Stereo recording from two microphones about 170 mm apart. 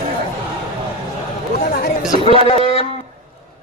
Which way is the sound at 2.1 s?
35° right (ahead or behind).